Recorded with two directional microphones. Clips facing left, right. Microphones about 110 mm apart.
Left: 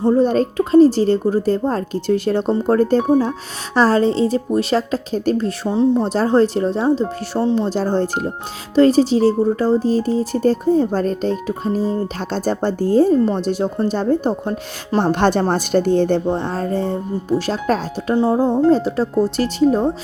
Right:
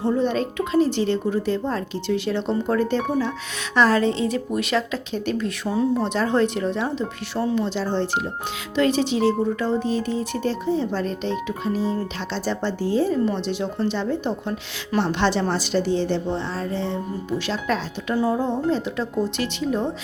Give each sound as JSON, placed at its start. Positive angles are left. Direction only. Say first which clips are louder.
{"t": 0.0, "sound": "speech", "louder": "left 7 dB", "side_deg": 40}
{"t": 6.1, "sound": "speech", "louder": "left 6 dB", "side_deg": 35}
{"t": 18.1, "sound": "speech", "louder": "left 6 dB", "side_deg": 30}